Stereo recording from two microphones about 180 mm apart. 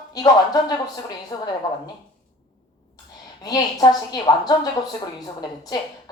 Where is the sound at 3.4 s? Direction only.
20° left (ahead or behind).